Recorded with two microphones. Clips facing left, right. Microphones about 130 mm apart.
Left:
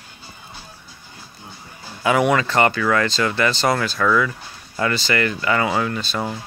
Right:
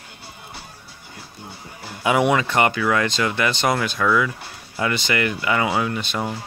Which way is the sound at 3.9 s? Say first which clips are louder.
Left 1 dB; 10° right (ahead or behind).